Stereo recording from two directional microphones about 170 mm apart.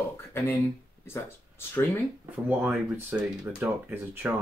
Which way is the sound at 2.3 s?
5° right (ahead or behind).